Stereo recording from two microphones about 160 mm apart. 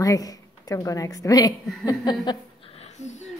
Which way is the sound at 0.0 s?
20° left (ahead or behind).